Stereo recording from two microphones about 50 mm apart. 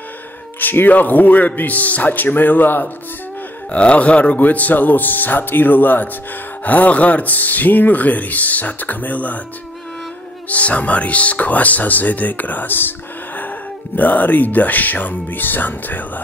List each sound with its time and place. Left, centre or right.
0.6 s speech: left
3.7 s speech: left
10.5 s speech: left
13.9 s speech: left